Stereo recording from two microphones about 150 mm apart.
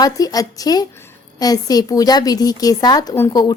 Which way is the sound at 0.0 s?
25° left (ahead or behind).